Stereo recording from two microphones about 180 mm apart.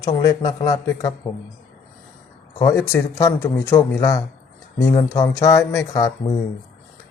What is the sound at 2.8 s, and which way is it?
Speech, 15° left (ahead or behind).